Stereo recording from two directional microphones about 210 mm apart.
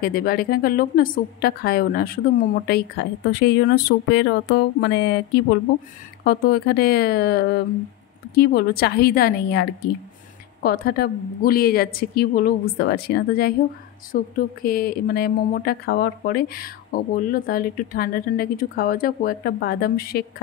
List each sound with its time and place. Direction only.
0.0 s a woman's voice: 45° left (ahead or behind)